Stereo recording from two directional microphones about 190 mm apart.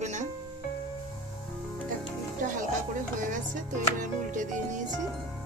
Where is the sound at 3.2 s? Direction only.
45° right (ahead or behind).